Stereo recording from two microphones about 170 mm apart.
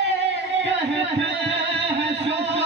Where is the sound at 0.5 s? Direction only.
90° right.